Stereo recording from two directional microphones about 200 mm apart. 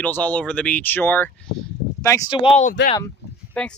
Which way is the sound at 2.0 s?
15° left (ahead or behind).